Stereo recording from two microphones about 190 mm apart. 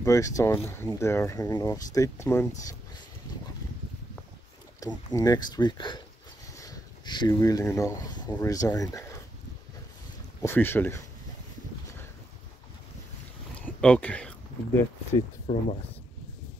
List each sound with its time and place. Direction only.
0.0 s speech: 15° left (ahead or behind)
4.7 s speech: 20° left (ahead or behind)
10.4 s speech: 10° left (ahead or behind)
13.6 s a sound: 5° left (ahead or behind)
15.5 s speech: 30° left (ahead or behind)